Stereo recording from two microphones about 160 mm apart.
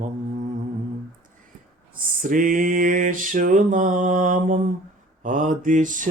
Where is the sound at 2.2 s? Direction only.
55° right (ahead or behind).